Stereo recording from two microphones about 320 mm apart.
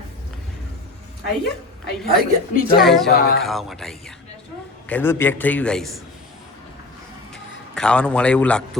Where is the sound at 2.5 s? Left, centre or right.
Left.